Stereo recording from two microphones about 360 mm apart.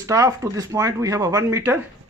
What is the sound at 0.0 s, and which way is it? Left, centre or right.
Speech, centre.